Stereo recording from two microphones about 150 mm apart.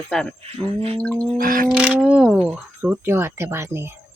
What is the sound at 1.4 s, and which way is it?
Music, 70° right (ahead or behind).